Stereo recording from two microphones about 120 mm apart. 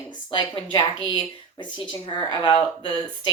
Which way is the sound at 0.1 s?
40° left (ahead or behind).